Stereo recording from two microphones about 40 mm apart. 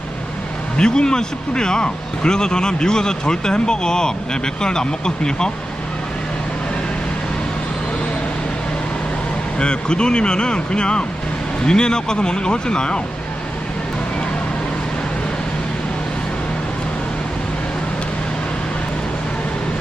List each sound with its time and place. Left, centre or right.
0.8 s speech: centre
9.6 s speech: left